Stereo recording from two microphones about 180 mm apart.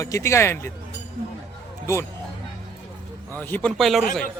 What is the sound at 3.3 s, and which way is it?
Speech, 10° left (ahead or behind).